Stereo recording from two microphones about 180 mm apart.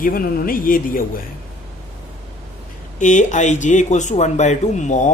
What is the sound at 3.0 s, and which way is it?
Speech, 45° left (ahead or behind).